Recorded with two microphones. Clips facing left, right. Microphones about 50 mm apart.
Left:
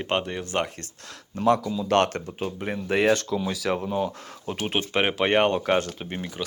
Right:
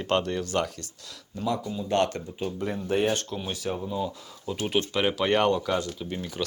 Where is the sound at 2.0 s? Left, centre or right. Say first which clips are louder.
Left 1 dB; left.